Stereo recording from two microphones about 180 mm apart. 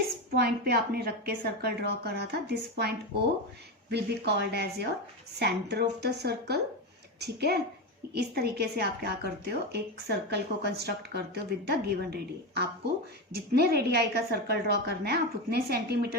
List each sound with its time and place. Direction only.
0.3 s a woman's voice: 60° right (ahead or behind)
3.9 s a woman's voice: 65° right (ahead or behind)